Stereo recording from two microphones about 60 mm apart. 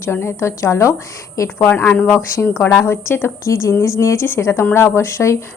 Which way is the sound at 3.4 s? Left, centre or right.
Left.